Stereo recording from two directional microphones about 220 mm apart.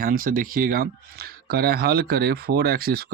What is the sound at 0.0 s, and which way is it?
Speech, 40° right (ahead or behind).